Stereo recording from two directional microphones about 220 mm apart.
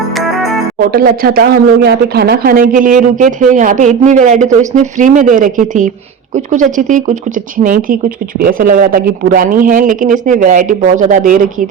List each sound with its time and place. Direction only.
0.9 s speech: 40° right (ahead or behind)